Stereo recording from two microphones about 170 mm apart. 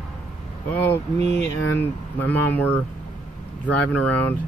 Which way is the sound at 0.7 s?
10° left (ahead or behind).